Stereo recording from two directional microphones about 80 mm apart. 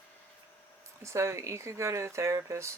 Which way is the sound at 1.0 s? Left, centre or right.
Right.